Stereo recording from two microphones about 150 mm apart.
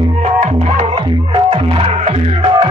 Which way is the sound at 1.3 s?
40° right (ahead or behind).